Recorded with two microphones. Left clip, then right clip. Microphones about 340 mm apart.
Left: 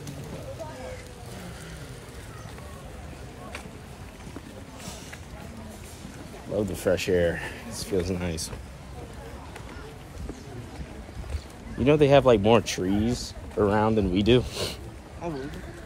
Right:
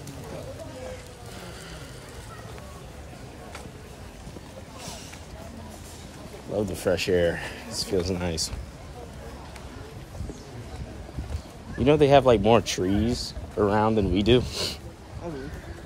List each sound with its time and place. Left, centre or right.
6.5 s speech: centre
11.8 s speech: centre
15.2 s bird: left